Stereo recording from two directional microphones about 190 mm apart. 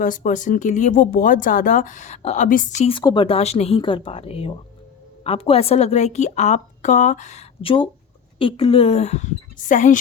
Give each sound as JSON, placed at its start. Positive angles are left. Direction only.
{"t": 0.0, "sound": "speech", "side_deg": 45}
{"t": 3.0, "sound": "a woman's voice", "side_deg": 25}